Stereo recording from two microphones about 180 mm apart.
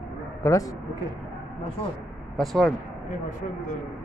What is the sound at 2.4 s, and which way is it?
Speech, centre (ahead or behind).